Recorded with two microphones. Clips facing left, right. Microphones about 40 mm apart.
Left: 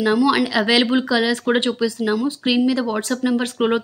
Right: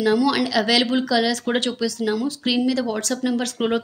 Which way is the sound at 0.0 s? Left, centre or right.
Left.